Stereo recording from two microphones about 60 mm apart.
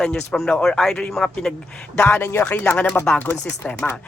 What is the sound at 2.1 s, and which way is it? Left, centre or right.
Speech, left.